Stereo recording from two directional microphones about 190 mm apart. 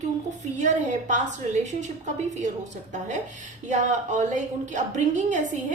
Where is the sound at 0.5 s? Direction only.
40° right (ahead or behind).